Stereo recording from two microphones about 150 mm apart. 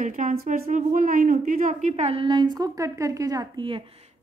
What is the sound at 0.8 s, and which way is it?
Speech, 65° right (ahead or behind).